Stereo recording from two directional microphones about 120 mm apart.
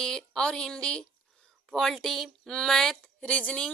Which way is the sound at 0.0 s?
5° left (ahead or behind).